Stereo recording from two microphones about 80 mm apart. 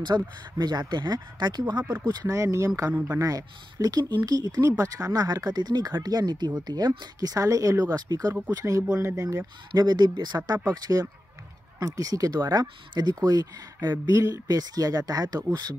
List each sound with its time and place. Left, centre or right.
0.0 s speech: right
2.2 s speech: right
9.7 s speech: right
10.7 s speech: right